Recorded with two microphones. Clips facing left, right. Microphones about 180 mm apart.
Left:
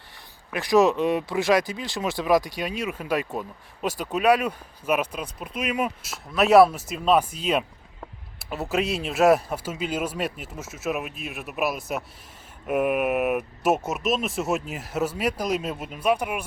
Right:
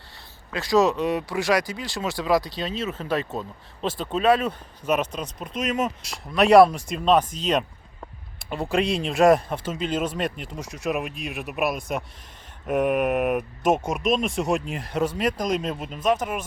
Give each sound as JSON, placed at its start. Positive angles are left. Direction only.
{"t": 0.5, "sound": "speech", "side_deg": 15}